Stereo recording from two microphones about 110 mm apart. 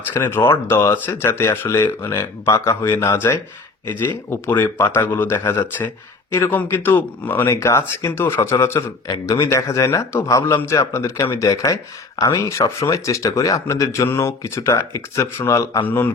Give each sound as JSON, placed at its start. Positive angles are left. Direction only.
{"t": 0.2, "sound": "speech", "side_deg": 20}